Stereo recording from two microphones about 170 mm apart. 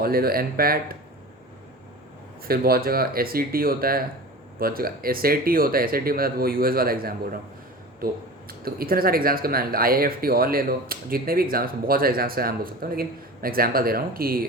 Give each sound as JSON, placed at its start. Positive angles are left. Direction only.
{"t": 0.0, "sound": "speech", "side_deg": -60}
{"t": 2.5, "sound": "speech", "side_deg": -60}